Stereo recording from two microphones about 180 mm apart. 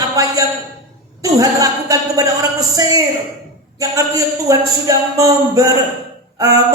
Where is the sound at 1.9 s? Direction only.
20° right (ahead or behind).